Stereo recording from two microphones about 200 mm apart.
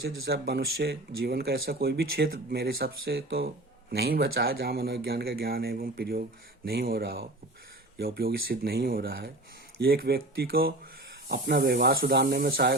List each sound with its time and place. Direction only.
0.3 s speech: 55° right (ahead or behind)